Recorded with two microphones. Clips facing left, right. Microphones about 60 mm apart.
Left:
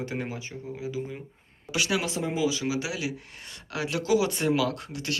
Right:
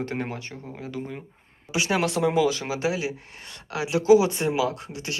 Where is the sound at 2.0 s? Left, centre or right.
Right.